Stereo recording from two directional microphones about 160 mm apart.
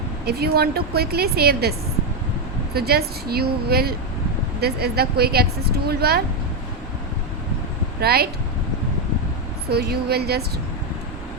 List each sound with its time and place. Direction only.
0.3 s speech: 80° right
2.7 s speech: 80° right
8.0 s speech: 75° right (ahead or behind)
9.6 s speech: 80° right